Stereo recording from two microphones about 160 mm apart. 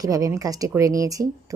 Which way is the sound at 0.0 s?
20° right (ahead or behind).